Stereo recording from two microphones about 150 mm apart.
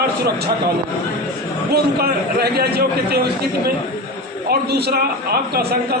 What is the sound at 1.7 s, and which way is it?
A man's voice, 90° right.